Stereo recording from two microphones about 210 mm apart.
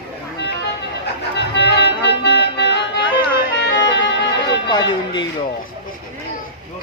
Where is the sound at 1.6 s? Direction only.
50° left (ahead or behind).